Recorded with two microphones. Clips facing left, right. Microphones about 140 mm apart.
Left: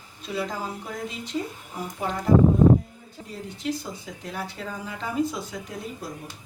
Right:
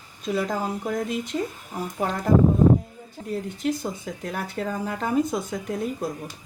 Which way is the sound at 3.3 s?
50° right (ahead or behind).